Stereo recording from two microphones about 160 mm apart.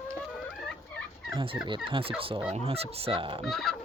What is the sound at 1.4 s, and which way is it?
Speech, 30° right (ahead or behind).